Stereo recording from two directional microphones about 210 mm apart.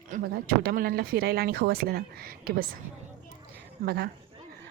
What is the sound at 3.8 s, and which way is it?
Speech, 45° right (ahead or behind).